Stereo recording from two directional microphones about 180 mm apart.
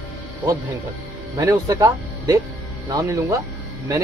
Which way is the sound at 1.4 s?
20° right (ahead or behind).